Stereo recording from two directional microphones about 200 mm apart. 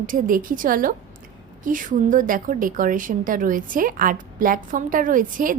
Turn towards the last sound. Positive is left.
turn(degrees=-40)  # may be behind; listen again after turning